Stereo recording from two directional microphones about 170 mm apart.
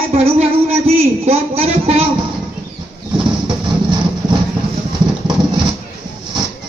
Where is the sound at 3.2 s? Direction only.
25° right (ahead or behind).